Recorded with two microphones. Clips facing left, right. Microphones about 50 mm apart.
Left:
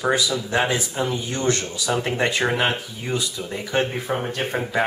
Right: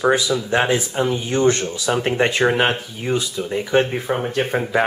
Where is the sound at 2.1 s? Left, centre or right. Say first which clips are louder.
Right 6 dB; centre.